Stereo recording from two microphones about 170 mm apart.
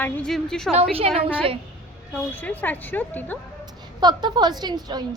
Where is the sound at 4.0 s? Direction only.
25° right (ahead or behind).